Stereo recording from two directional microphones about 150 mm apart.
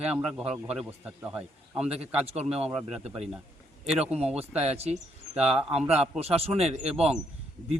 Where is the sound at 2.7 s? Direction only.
5° right (ahead or behind).